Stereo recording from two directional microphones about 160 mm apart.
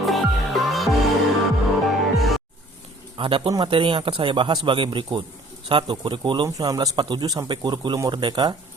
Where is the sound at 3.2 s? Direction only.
30° right (ahead or behind).